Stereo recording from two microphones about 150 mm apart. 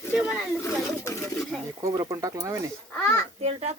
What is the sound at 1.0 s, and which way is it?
Speech, 20° left (ahead or behind).